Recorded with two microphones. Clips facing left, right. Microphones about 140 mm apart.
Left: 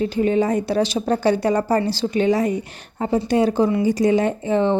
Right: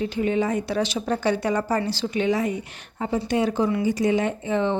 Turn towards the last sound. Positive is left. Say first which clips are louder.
# left 4 dB
turn(degrees=35)  # may be behind; listen again after turning